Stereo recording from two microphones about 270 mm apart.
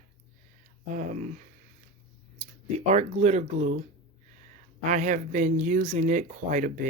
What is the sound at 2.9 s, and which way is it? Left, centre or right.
Speech, right.